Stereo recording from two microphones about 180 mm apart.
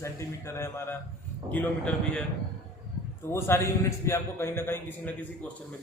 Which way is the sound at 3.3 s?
15° left (ahead or behind).